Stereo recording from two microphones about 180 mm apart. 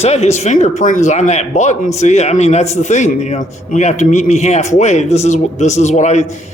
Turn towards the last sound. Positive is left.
turn(degrees=40)  # may be behind; listen again after turning